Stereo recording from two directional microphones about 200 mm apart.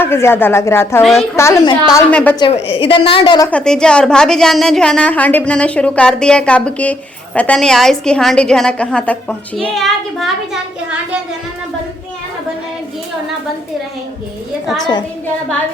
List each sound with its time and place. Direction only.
0.0 s speech: 10° left (ahead or behind)
2.7 s a woman's voice: 25° left (ahead or behind)
3.5 s a woman's voice: 5° left (ahead or behind)
14.8 s a woman's voice: 20° left (ahead or behind)